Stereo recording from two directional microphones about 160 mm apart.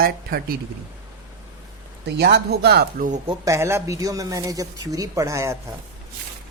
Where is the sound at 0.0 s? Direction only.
70° right (ahead or behind).